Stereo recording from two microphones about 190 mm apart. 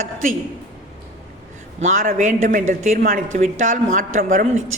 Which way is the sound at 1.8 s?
45° right (ahead or behind).